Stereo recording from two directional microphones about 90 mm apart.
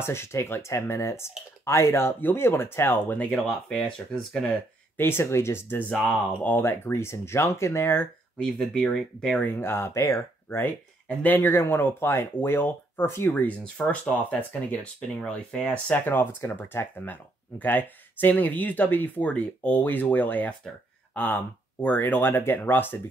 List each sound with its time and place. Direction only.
0.0 s speech: 30° left (ahead or behind); by 4.6 s 5° left (ahead or behind)
4.9 s speech: 25° left (ahead or behind)
8.4 s speech: 5° left (ahead or behind)
9.3 s speech: 20° left (ahead or behind)
11.1 s speech: 20° left (ahead or behind)